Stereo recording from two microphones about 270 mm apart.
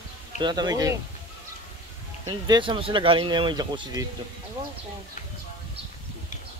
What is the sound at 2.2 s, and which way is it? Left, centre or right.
Speech, centre.